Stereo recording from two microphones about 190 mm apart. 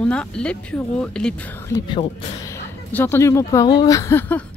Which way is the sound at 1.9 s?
30° left (ahead or behind).